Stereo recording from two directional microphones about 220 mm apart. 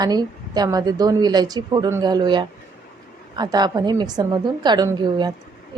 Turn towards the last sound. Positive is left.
turn(degrees=-20)  # may be behind; listen again after turning